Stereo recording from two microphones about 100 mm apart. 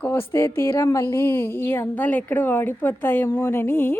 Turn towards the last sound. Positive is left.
turn(degrees=25)  # may be behind; listen again after turning